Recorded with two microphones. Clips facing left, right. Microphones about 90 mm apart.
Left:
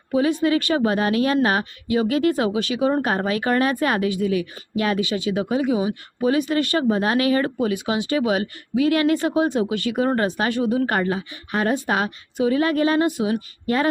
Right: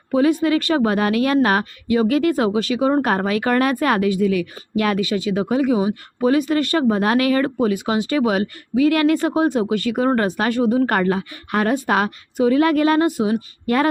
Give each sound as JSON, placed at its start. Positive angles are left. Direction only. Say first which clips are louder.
{"t": 0.1, "sound": "a woman's voice", "louder": "right 3 dB", "side_deg": -40}